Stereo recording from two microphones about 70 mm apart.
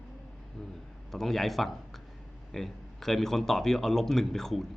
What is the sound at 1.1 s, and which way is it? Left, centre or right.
Speech, centre.